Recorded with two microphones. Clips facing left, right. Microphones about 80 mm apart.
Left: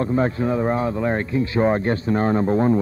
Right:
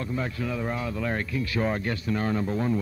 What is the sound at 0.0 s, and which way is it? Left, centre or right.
Speech, left.